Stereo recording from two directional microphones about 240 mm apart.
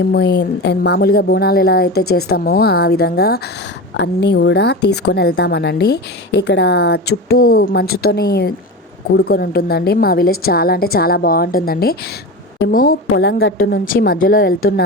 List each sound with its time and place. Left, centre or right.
0.0 s a woman's voice: left